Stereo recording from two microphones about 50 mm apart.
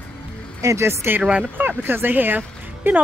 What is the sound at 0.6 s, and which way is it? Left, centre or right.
Speech, right.